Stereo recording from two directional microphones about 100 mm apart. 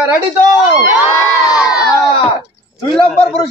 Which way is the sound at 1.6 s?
10° right (ahead or behind).